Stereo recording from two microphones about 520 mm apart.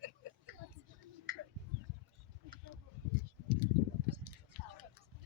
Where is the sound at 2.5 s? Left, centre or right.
Right.